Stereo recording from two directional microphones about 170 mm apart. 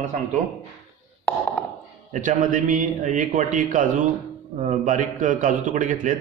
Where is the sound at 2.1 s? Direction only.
50° right (ahead or behind).